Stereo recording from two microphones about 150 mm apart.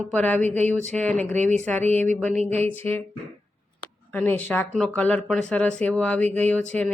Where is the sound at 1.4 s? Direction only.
50° right (ahead or behind).